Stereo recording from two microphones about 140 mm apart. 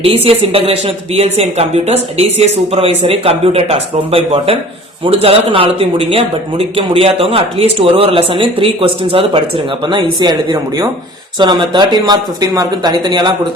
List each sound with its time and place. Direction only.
0.0 s speech: 40° right (ahead or behind)